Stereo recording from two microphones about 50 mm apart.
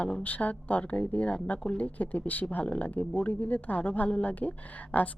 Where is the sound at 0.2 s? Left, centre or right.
Left.